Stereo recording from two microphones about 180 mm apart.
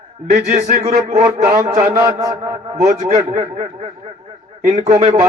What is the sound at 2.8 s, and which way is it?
A man's voice, 45° right (ahead or behind).